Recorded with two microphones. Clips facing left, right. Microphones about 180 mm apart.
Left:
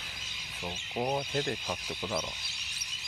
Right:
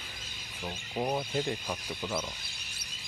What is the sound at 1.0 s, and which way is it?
Speech, centre (ahead or behind).